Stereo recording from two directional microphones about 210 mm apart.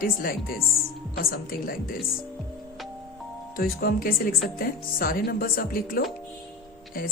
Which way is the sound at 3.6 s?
45° left (ahead or behind).